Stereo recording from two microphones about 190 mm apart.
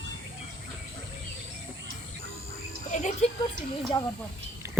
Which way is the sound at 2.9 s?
35° left (ahead or behind).